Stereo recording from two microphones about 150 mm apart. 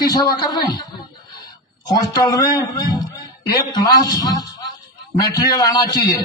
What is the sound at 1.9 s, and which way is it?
A man's voice, 25° left (ahead or behind).